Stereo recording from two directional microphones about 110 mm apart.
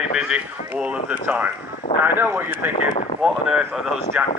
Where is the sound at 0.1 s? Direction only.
5° right (ahead or behind).